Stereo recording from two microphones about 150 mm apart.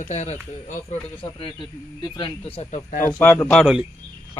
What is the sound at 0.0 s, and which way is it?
Speech, 50° left (ahead or behind).